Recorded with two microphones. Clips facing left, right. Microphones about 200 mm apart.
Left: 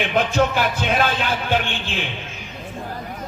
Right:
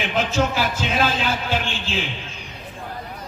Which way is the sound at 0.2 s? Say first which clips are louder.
Left 2 dB; 55° left (ahead or behind).